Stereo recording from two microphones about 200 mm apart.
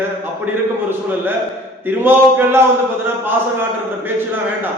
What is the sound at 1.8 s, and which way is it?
Speech, 10° right (ahead or behind).